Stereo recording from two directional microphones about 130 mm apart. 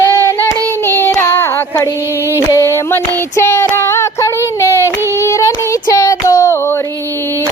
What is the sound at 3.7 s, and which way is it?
Female singing, 20° left (ahead or behind).